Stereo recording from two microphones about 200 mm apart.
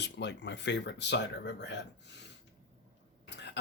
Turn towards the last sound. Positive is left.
turn(degrees=60)  # may be behind; listen again after turning